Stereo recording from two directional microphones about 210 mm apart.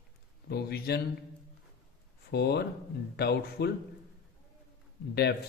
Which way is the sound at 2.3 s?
50° left (ahead or behind).